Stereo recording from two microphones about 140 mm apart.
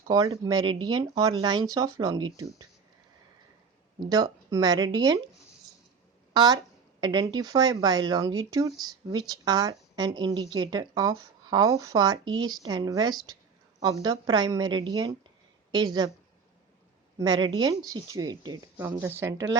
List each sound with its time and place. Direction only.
0.1 s speech: 30° right (ahead or behind)
4.1 s speech: 25° right (ahead or behind)
6.3 s a woman's voice: 30° right (ahead or behind)
17.2 s speech: 30° right (ahead or behind)
18.9 s a woman's voice: 15° right (ahead or behind)